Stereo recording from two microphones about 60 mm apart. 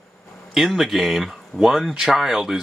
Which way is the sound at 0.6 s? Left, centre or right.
Centre.